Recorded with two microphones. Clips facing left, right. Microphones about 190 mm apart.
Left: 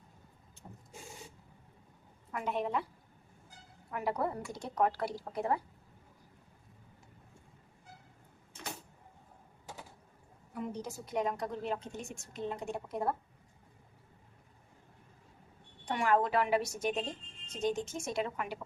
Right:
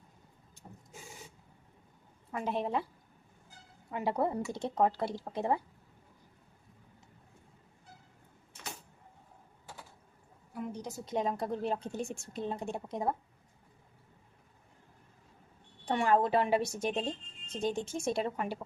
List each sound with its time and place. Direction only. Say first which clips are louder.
2.3 s a woman's voice: right 1 dB; 30° right (ahead or behind)
3.9 s a woman's voice: right 3 dB; 25° right (ahead or behind)
10.5 s a sound: even; 5° right (ahead or behind)
10.8 s a woman's voice: right 2 dB; 25° right (ahead or behind)
15.9 s a woman's voice: right 2 dB; 30° right (ahead or behind)